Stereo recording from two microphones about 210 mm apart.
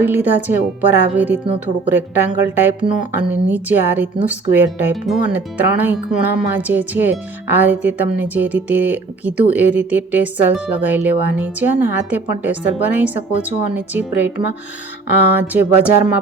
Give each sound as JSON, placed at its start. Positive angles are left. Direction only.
{"t": 0.0, "sound": "speech", "side_deg": -10}